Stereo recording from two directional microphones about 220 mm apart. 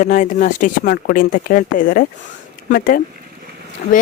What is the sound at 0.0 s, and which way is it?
A woman's voice, 35° left (ahead or behind).